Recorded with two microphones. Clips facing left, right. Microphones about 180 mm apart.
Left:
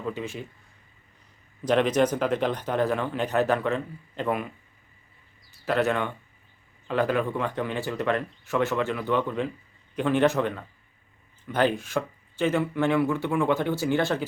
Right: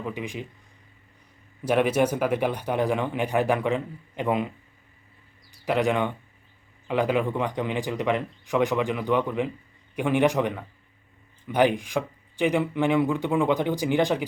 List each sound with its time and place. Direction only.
0.0 s speech: 15° right (ahead or behind)
1.6 s speech: 10° right (ahead or behind)
5.6 s speech: 15° right (ahead or behind)